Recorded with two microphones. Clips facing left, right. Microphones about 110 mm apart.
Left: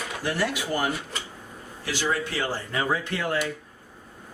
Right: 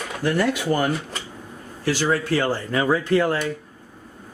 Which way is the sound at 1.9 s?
45° right (ahead or behind).